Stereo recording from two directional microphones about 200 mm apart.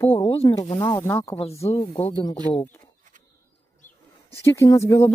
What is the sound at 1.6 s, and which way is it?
Speech, 30° left (ahead or behind).